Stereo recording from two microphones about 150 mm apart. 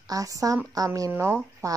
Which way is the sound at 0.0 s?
25° right (ahead or behind).